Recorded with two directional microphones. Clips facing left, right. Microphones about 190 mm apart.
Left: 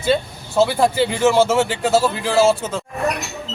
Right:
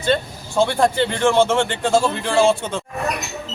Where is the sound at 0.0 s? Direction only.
5° left (ahead or behind).